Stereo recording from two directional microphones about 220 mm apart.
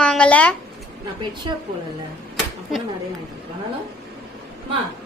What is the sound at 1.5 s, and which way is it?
Speech, 20° right (ahead or behind).